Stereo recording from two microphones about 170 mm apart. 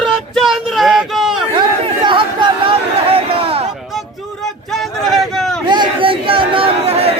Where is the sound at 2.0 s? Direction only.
30° right (ahead or behind).